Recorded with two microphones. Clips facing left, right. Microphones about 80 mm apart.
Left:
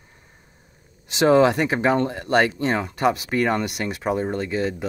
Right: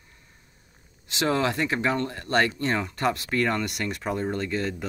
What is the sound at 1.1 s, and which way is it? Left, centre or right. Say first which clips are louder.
Speech: left 9 dB; left.